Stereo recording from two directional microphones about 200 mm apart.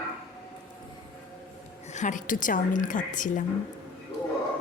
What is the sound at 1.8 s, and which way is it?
A woman's voice, 35° left (ahead or behind).